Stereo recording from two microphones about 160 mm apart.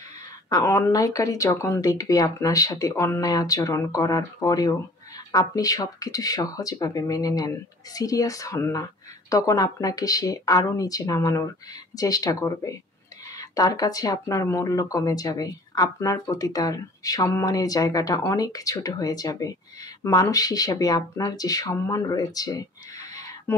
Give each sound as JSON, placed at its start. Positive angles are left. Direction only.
{"t": 0.5, "sound": "speech", "side_deg": 20}